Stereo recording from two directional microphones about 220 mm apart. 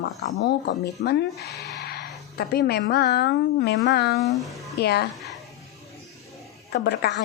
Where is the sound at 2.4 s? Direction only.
45° left (ahead or behind).